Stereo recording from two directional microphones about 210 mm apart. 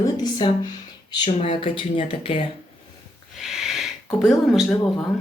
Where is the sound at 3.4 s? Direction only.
Centre (ahead or behind).